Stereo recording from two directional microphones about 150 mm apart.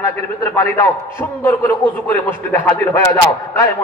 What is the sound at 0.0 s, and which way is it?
A man's voice, 20° left (ahead or behind).